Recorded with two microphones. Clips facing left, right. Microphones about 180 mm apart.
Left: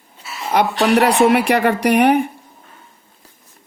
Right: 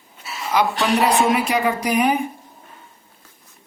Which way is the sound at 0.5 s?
70° left (ahead or behind).